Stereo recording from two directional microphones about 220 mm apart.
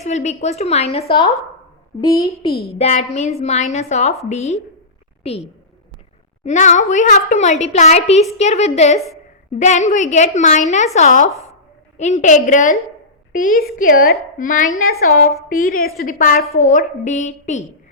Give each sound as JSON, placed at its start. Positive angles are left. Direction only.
{"t": 0.0, "sound": "a woman's voice", "side_deg": 30}
{"t": 6.4, "sound": "a woman's voice", "side_deg": 35}